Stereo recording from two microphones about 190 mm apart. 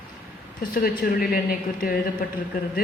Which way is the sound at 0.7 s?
50° left (ahead or behind).